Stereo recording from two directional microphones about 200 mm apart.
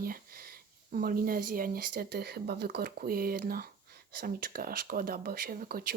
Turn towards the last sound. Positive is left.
turn(degrees=-50)  # may be behind; listen again after turning